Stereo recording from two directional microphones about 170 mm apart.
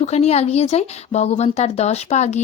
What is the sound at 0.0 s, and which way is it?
Speech, 40° left (ahead or behind).